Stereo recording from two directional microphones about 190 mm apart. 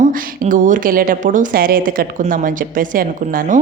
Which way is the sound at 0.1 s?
45° right (ahead or behind).